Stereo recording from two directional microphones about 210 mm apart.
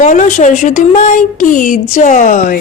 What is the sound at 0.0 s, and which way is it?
Speech, 35° left (ahead or behind).